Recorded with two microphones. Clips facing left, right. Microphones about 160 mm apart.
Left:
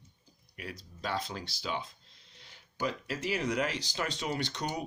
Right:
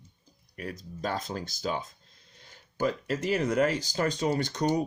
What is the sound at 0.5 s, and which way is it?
Speech, 45° right (ahead or behind).